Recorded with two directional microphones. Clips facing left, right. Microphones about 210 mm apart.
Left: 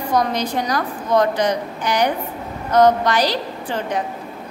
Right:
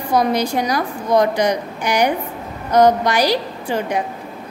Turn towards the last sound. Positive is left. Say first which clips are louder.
# right 2 dB
turn(degrees=-10)  # may be behind; listen again after turning